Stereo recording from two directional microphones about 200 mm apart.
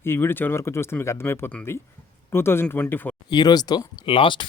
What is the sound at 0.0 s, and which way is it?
Speech, 10° left (ahead or behind).